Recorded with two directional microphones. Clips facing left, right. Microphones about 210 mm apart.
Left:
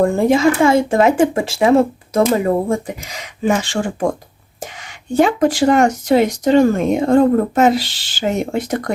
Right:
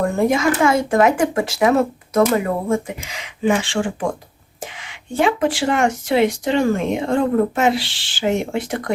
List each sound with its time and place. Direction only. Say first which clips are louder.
0.0 s speech: left 4 dB; 30° left (ahead or behind)